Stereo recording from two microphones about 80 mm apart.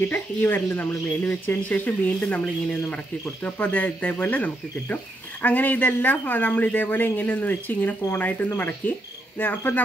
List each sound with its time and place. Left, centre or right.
0.1 s speech: left
9.4 s speech: centre